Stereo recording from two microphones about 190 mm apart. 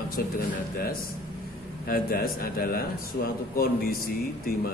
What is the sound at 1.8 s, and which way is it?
Speech, 50° left (ahead or behind).